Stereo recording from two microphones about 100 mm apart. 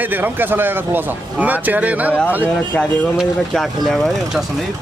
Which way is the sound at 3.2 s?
Centre (ahead or behind).